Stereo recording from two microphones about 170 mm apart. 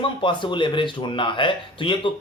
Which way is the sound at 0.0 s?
30° left (ahead or behind).